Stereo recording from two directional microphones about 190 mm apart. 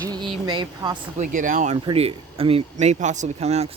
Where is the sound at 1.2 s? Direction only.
45° right (ahead or behind).